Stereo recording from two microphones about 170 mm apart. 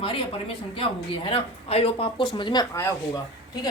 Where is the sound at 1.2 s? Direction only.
35° left (ahead or behind).